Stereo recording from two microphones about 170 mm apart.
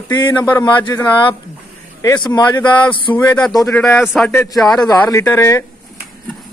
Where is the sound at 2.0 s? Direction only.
20° left (ahead or behind).